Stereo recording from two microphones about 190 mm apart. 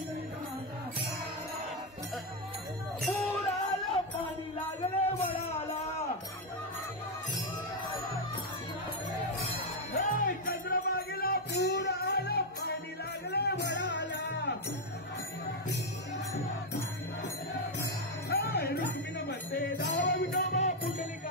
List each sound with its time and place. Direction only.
3.0 s music: centre (ahead or behind)
10.0 s music: 45° left (ahead or behind); by 14.6 s 60° left (ahead or behind)
18.3 s music: 55° left (ahead or behind)
20.5 s music: 35° left (ahead or behind)